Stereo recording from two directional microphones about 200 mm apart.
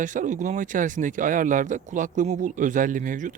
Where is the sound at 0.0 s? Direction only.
40° right (ahead or behind).